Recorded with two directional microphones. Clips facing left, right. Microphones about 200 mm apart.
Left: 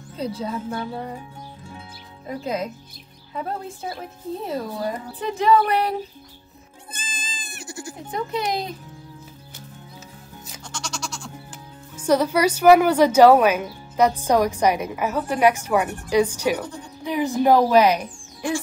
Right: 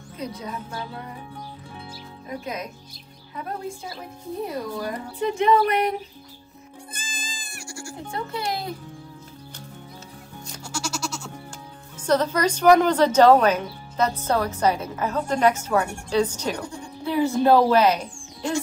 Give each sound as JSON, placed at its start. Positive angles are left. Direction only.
{"t": 0.2, "sound": "speech", "side_deg": 30}
{"t": 2.2, "sound": "speech", "side_deg": 30}
{"t": 4.5, "sound": "speech", "side_deg": 30}
{"t": 6.9, "sound": "goat", "side_deg": 20}
{"t": 10.6, "sound": "music", "side_deg": -5}
{"t": 12.1, "sound": "speech", "side_deg": 10}